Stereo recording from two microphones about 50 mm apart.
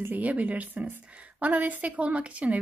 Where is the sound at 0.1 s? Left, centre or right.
Right.